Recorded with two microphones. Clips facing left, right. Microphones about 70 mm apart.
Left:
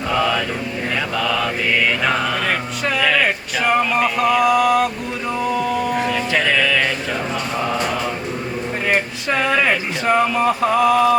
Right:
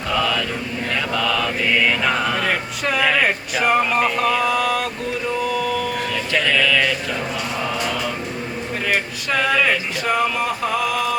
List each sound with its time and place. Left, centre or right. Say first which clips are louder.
0.1 s mantra: left 2 dB; centre
5.5 s mantra: left 3 dB; left
9.3 s a sound: left 1 dB; left